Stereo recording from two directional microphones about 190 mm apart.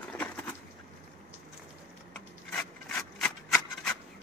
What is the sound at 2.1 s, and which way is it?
Rub, 5° left (ahead or behind).